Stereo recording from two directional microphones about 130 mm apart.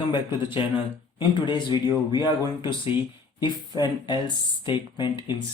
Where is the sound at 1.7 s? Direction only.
30° right (ahead or behind).